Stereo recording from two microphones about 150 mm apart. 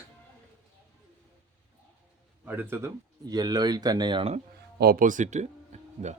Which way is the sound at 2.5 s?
15° right (ahead or behind).